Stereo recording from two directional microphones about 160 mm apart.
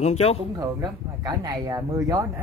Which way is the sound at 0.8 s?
25° right (ahead or behind).